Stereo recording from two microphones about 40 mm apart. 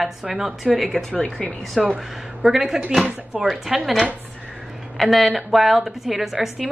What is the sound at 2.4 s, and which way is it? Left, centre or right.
A woman's voice, centre.